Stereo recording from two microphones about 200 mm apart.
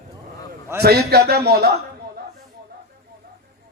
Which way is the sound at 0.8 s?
55° right (ahead or behind).